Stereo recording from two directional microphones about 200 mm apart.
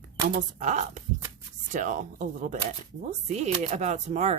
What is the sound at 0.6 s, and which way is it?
Speech, 35° right (ahead or behind).